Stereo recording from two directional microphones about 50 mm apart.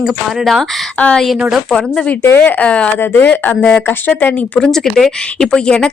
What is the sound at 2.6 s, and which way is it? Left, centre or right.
Speech, left.